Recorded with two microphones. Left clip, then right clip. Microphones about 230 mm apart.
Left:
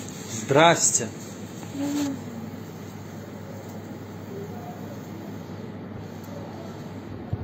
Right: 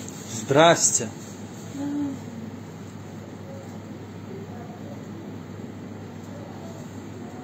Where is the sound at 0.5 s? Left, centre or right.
Right.